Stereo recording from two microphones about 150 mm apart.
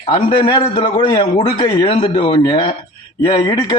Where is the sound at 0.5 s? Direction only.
30° left (ahead or behind).